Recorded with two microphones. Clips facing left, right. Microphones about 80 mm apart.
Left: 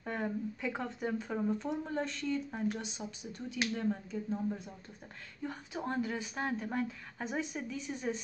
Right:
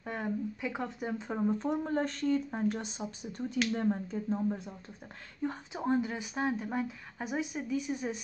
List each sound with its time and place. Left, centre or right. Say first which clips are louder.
0.0 s speech: right 1 dB; centre
1.1 s speech: right 4 dB; right
1.6 s speech: right 5 dB; right
5.8 s speech: right 4 dB; centre